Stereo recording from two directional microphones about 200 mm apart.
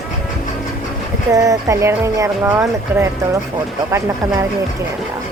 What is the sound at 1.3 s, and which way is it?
Speech, 15° right (ahead or behind).